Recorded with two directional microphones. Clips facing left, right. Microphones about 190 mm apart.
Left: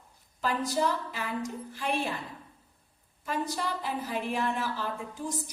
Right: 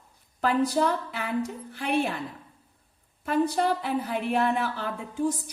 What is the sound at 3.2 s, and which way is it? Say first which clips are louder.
A woman's voice: right 8 dB; 60° right (ahead or behind).